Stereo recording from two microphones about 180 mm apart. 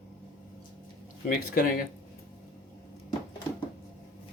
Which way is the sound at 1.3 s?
50° left (ahead or behind).